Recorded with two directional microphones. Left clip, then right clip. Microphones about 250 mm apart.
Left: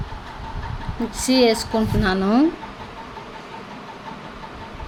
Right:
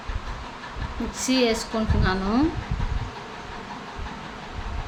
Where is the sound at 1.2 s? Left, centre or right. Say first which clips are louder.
Left 5 dB; centre.